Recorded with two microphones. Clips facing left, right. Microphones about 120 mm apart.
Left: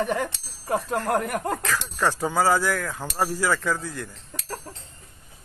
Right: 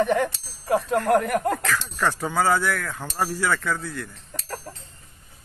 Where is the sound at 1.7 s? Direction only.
15° left (ahead or behind).